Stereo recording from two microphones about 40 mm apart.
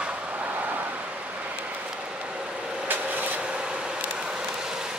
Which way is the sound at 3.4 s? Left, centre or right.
Right.